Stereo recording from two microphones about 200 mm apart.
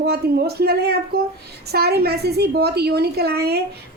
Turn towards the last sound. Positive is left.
turn(degrees=-50)  # may be behind; listen again after turning